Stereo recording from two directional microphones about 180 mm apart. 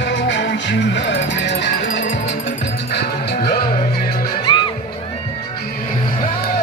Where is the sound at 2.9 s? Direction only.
65° left (ahead or behind).